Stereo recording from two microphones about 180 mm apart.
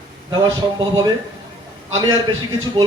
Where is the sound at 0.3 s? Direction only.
25° right (ahead or behind).